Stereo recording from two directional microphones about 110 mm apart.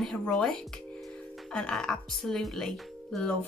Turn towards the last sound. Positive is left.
turn(degrees=5)  # may be behind; listen again after turning